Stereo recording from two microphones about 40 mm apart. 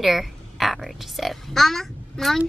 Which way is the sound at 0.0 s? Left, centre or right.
Centre.